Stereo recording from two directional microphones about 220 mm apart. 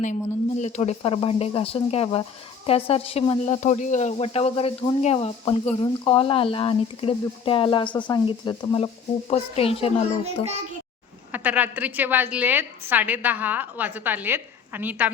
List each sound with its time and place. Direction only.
0.0 s speech: 35° left (ahead or behind)
11.3 s a woman's voice: 5° right (ahead or behind)